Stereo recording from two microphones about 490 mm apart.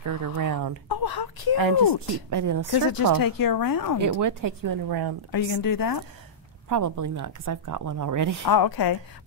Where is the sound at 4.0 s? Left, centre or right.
Right.